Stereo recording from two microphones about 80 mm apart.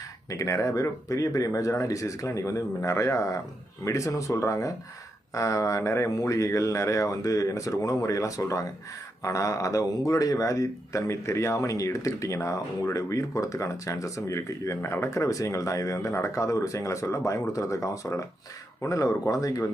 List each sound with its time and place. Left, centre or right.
0.3 s speech: left